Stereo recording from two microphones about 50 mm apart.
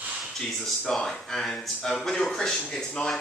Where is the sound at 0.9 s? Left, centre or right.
Centre.